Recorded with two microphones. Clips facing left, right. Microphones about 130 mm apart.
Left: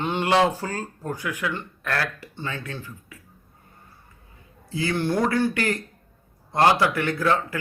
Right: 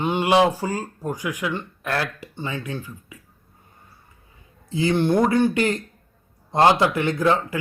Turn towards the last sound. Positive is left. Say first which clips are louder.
# right 3 dB
turn(degrees=-20)  # may be behind; listen again after turning